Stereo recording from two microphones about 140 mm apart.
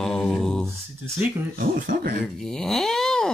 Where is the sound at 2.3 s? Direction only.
5° left (ahead or behind).